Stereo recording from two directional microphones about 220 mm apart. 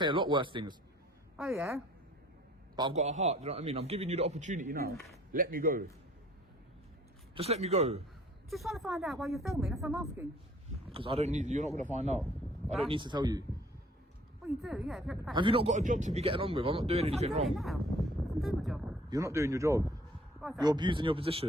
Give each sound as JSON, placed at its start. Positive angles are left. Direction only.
{"t": 0.0, "sound": "speech", "side_deg": -20}
{"t": 1.5, "sound": "speech", "side_deg": -10}
{"t": 2.9, "sound": "a man's voice", "side_deg": -30}
{"t": 7.3, "sound": "speech", "side_deg": -30}
{"t": 8.4, "sound": "speech", "side_deg": 0}
{"t": 9.9, "sound": "speech", "side_deg": -10}
{"t": 10.9, "sound": "a man's voice", "side_deg": -25}
{"t": 14.4, "sound": "speech", "side_deg": 0}
{"t": 15.3, "sound": "speech", "side_deg": -20}
{"t": 17.5, "sound": "speech", "side_deg": 0}
{"t": 19.1, "sound": "speech", "side_deg": -15}